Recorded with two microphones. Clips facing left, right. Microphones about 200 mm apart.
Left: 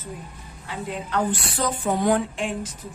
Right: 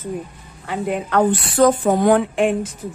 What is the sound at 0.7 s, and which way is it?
A woman's voice, 65° right (ahead or behind).